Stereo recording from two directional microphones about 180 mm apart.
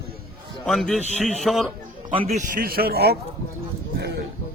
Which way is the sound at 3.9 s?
65° right (ahead or behind).